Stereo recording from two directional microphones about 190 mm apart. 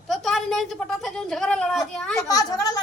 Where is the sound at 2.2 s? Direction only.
20° left (ahead or behind).